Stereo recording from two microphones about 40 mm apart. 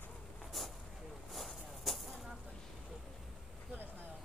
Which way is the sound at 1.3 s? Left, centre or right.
Centre.